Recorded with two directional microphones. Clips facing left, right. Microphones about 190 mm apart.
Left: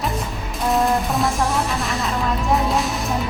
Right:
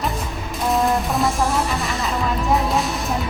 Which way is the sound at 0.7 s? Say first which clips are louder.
Even; centre (ahead or behind).